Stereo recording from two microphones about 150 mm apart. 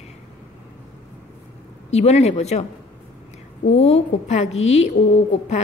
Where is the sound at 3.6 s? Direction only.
45° left (ahead or behind).